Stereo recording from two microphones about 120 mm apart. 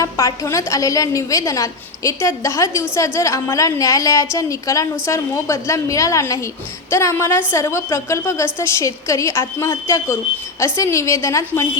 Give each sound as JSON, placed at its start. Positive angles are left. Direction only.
{"t": 0.0, "sound": "a woman's voice", "side_deg": 25}